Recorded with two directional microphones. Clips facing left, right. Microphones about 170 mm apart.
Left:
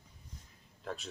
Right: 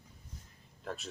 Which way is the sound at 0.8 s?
Centre (ahead or behind).